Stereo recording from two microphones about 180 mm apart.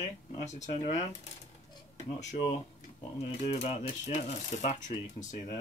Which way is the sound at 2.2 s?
40° left (ahead or behind).